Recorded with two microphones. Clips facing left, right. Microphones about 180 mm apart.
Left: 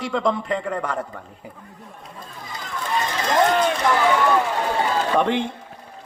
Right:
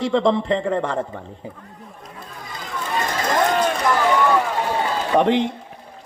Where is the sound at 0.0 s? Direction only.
25° right (ahead or behind).